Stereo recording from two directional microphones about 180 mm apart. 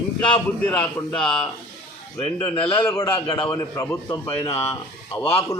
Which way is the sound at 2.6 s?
30° left (ahead or behind).